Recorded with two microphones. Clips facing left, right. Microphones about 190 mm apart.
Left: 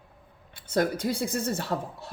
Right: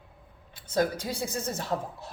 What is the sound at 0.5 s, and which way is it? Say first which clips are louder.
A woman's voice: left 1 dB; 55° left (ahead or behind).